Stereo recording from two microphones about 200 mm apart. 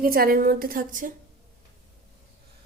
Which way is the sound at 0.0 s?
50° right (ahead or behind).